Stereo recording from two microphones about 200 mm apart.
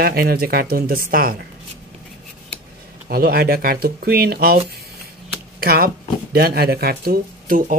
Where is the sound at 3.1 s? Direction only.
50° right (ahead or behind).